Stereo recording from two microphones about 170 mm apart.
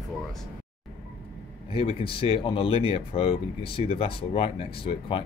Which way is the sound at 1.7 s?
30° left (ahead or behind).